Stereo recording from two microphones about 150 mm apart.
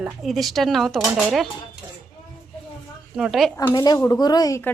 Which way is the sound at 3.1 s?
5° right (ahead or behind).